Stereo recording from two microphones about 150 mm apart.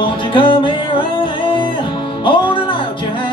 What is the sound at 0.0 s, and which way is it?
Music, 35° left (ahead or behind).